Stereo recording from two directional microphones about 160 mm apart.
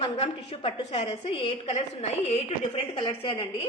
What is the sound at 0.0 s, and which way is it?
A woman's voice, 40° left (ahead or behind).